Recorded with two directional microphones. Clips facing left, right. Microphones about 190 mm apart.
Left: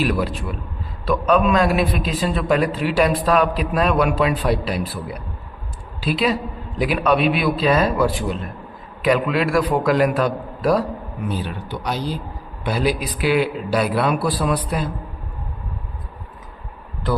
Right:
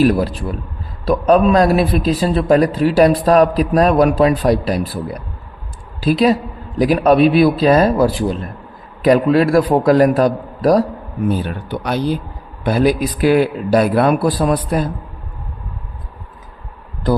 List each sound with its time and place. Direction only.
0.0 s a man's voice: 40° right (ahead or behind)
11.3 s speech: 50° right (ahead or behind)
12.6 s speech: 50° right (ahead or behind)